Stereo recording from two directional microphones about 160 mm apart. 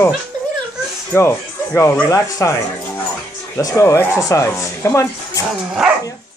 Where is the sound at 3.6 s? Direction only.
20° left (ahead or behind).